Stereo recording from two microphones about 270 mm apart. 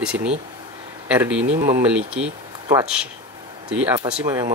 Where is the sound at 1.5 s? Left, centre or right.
Right.